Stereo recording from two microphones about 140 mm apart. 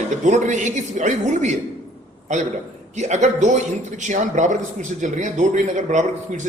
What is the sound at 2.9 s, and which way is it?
A man's voice, 55° right (ahead or behind).